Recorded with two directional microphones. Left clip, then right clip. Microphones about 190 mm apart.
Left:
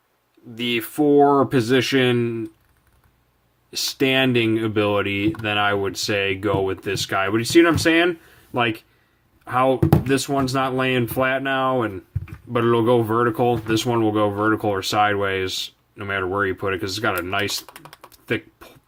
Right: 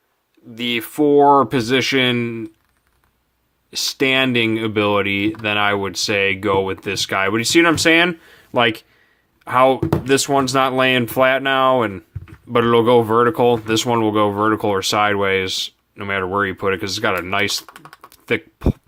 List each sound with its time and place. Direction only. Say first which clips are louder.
0.5 s speech: right 2 dB; 20° right (ahead or behind)
3.7 s speech: right 3 dB; 20° right (ahead or behind)
17.7 s speech: right 2 dB; 10° right (ahead or behind)
18.1 s typing: right 5 dB; 25° right (ahead or behind)